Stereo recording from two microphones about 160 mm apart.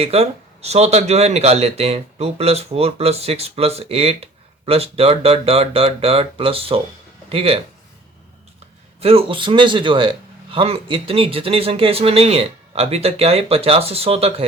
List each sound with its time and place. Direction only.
0.0 s speech: 40° right (ahead or behind)
9.0 s speech: 40° right (ahead or behind)